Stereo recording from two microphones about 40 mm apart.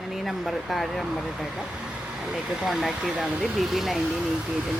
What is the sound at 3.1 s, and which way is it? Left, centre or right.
Speech, right.